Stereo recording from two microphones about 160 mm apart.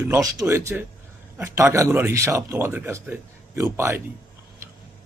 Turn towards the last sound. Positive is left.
turn(degrees=-15)  # may be behind; listen again after turning